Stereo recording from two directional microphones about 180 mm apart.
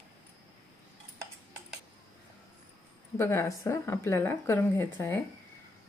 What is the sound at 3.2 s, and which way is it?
A woman's voice, 15° left (ahead or behind).